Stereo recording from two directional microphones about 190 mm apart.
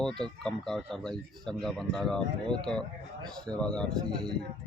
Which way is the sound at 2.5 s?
25° right (ahead or behind).